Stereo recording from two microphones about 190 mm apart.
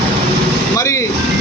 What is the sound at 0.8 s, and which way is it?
Vehicle, 15° left (ahead or behind).